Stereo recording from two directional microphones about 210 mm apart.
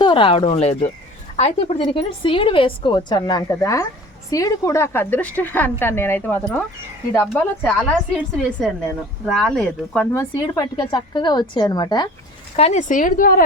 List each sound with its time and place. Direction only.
0.0 s a woman's voice: 25° left (ahead or behind); by 8.2 s 5° left (ahead or behind)
9.4 s speech: 5° left (ahead or behind)
12.5 s a woman's voice: 30° left (ahead or behind)